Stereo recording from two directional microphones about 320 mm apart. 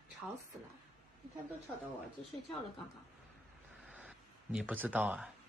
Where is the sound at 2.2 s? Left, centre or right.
Centre.